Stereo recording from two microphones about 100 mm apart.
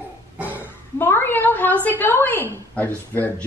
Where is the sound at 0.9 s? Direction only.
25° left (ahead or behind).